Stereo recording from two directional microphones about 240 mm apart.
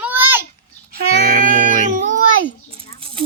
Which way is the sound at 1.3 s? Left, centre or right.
Right.